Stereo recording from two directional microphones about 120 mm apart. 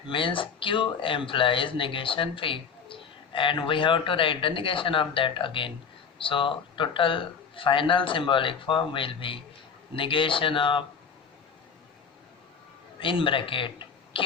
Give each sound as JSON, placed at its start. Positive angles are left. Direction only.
{"t": 0.1, "sound": "speech", "side_deg": 45}
{"t": 13.0, "sound": "speech", "side_deg": 45}